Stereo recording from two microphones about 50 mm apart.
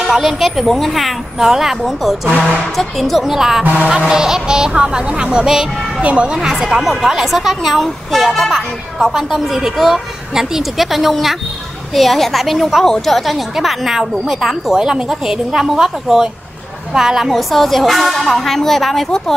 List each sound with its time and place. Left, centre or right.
0.0 s a woman's voice: centre
6.0 s speech: right
6.3 s a woman's voice: centre
17.3 s a woman's voice: centre